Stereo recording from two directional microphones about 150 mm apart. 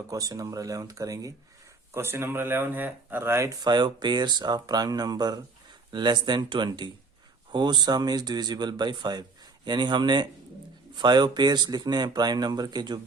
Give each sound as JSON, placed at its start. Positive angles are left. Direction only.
{"t": 0.1, "sound": "speech", "side_deg": -25}